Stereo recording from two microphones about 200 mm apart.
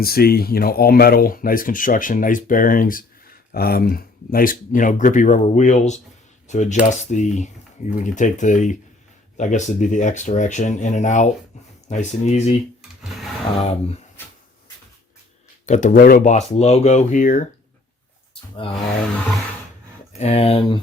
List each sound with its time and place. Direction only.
0.0 s speech: 50° left (ahead or behind)
13.6 s speech: 30° left (ahead or behind)
15.6 s speech: 40° left (ahead or behind)
18.6 s speech: 25° left (ahead or behind)
20.1 s speech: 30° left (ahead or behind)